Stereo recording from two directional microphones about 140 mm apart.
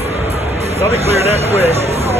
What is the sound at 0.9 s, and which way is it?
Speech, 50° right (ahead or behind).